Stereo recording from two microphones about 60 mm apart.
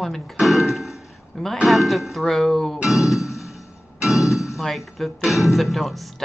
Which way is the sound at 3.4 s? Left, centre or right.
Left.